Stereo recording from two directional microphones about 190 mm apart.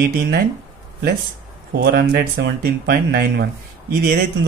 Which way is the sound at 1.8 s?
55° right (ahead or behind).